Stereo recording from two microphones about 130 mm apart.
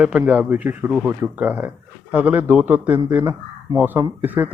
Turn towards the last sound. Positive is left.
turn(degrees=-15)  # may be behind; listen again after turning